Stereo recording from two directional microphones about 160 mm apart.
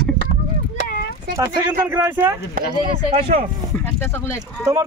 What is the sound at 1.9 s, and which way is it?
Speech, 15° right (ahead or behind).